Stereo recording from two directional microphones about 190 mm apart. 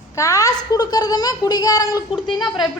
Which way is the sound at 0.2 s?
15° left (ahead or behind).